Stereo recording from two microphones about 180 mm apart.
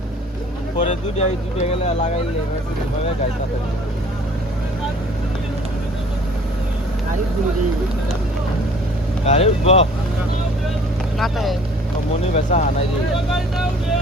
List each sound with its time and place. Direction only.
0.8 s speech: 35° left (ahead or behind)
9.2 s speech: 35° left (ahead or behind)
11.2 s speech: centre (ahead or behind)
12.3 s speech: 45° left (ahead or behind)